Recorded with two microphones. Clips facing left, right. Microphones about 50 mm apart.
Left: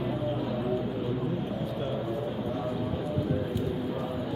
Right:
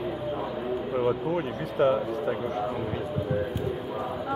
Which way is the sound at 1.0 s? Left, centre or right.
Right.